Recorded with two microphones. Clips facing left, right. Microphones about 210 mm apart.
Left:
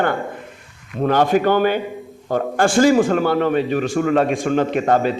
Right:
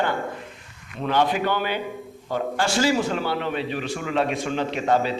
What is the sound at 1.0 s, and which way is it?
A man's voice, 45° left (ahead or behind).